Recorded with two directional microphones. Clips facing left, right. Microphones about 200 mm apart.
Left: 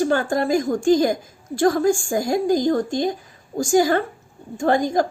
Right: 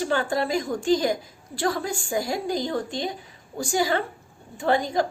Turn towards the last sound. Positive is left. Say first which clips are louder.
# left 4 dB
turn(degrees=45)  # may be behind; listen again after turning